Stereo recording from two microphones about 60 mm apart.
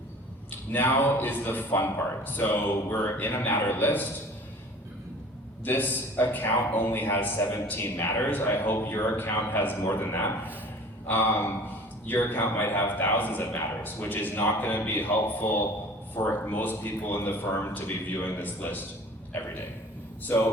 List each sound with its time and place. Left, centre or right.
0.7 s a man's voice: left
5.6 s a man's voice: left
20.2 s a man's voice: left